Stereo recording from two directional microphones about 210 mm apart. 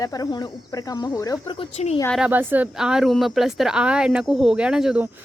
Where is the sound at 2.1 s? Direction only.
5° right (ahead or behind).